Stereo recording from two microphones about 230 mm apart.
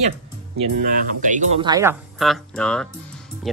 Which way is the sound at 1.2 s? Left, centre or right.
Right.